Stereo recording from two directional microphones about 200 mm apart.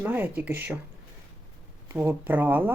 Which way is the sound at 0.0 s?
10° right (ahead or behind).